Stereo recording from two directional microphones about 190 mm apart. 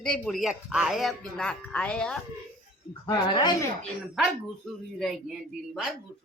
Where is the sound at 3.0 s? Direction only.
20° left (ahead or behind).